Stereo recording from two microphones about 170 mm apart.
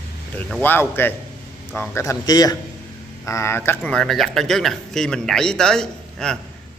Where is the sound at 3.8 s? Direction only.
5° left (ahead or behind).